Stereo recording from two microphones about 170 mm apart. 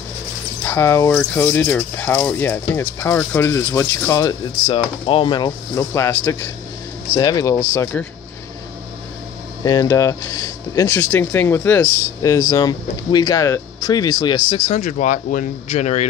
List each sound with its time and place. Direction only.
0.7 s speech: 15° left (ahead or behind)
9.7 s speech: 20° left (ahead or behind)
14.7 s speech: 45° left (ahead or behind)